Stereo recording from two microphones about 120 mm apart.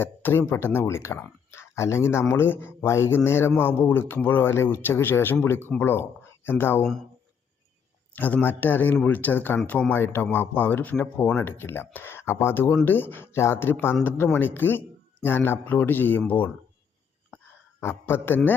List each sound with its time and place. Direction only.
0.0 s a man's voice: 20° left (ahead or behind)
8.1 s a man's voice: 15° left (ahead or behind)
17.7 s a man's voice: 20° left (ahead or behind)